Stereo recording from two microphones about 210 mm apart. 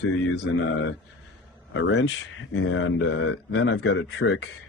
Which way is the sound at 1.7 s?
65° left (ahead or behind).